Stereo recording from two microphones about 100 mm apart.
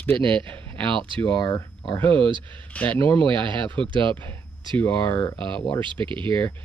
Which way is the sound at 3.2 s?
55° right (ahead or behind).